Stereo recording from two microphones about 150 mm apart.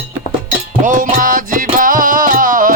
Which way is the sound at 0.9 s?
60° right (ahead or behind).